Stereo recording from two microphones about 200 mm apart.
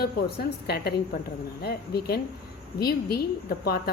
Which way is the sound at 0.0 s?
50° left (ahead or behind).